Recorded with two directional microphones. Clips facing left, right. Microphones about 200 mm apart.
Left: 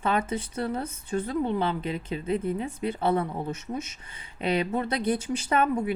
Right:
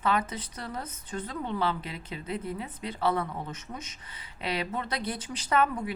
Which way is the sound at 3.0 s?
25° left (ahead or behind).